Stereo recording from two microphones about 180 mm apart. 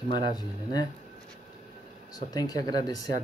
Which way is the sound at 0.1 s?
25° left (ahead or behind).